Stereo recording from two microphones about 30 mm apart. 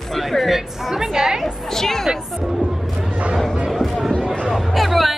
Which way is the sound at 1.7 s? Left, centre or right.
Centre.